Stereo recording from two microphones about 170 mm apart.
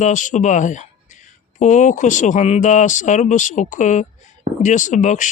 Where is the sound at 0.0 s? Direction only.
50° left (ahead or behind).